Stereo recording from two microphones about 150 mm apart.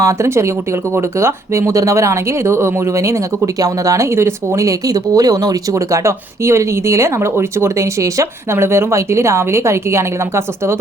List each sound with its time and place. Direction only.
0.0 s speech: 20° right (ahead or behind)